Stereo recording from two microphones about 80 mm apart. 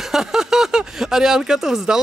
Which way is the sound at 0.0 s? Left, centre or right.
Centre.